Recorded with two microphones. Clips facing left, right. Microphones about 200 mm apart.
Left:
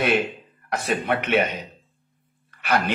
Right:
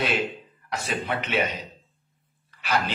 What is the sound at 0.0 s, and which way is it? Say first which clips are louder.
A man's voice: left 4 dB; 55° left (ahead or behind).